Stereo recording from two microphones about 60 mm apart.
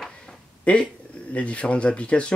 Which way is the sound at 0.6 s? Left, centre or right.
Left.